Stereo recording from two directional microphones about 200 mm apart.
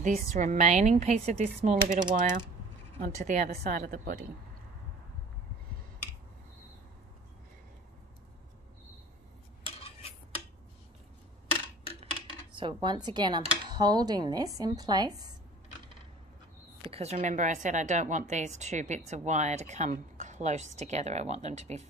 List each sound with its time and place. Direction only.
0.0 s a woman's voice: 40° right (ahead or behind)
9.8 s cutlery: 30° left (ahead or behind)
12.5 s speech: 25° right (ahead or behind)
16.9 s a woman's voice: 35° right (ahead or behind)